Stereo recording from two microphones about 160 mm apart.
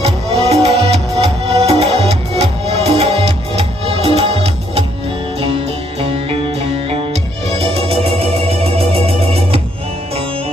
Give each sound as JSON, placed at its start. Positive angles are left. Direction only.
{"t": 0.5, "sound": "music", "side_deg": -40}